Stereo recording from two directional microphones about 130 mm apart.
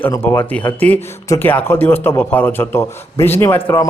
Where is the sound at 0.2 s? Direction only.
15° left (ahead or behind).